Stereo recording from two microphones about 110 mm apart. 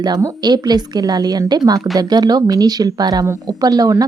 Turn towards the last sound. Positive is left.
turn(degrees=-35)  # may be behind; listen again after turning